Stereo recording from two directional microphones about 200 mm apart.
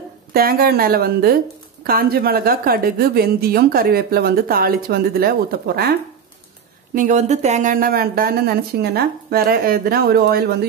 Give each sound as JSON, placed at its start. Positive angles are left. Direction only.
{"t": 0.3, "sound": "a woman's voice", "side_deg": -50}
{"t": 7.0, "sound": "a woman's voice", "side_deg": -35}